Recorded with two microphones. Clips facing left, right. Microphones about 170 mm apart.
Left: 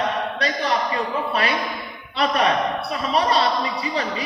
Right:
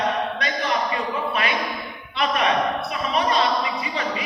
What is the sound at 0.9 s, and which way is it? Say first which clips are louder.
A woman's voice: left 1 dB; 35° left (ahead or behind).